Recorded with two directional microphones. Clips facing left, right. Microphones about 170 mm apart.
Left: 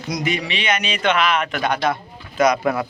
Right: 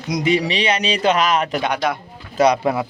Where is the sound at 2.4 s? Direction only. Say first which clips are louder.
Right 2 dB; 30° right (ahead or behind).